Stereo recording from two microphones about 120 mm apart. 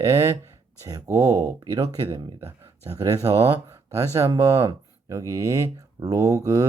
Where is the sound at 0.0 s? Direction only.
20° right (ahead or behind).